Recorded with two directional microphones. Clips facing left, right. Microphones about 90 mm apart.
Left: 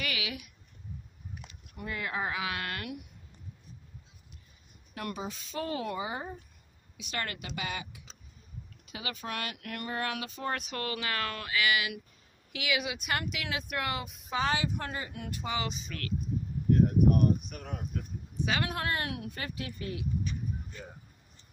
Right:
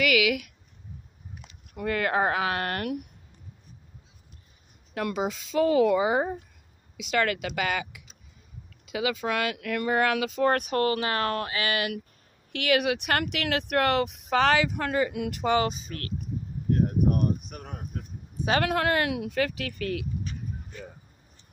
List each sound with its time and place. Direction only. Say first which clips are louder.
0.0 s a woman's voice: right 13 dB; 85° right
1.8 s speech: right 10 dB; 70° right (ahead or behind); by 3.1 s 50° right (ahead or behind)
4.9 s speech: right 9 dB; 90° right
10.5 s speech: right 10 dB; 50° right (ahead or behind)
12.5 s speech: right 9 dB; 60° right (ahead or behind); by 15.5 s 80° right
15.5 s speech: right 10 dB; 45° right (ahead or behind)
18.6 s speech: right 8 dB; 85° right